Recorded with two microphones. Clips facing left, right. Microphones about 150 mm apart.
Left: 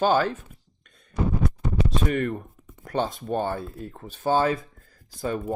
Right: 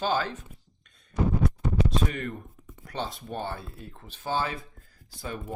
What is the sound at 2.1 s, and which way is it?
Speech, 55° left (ahead or behind).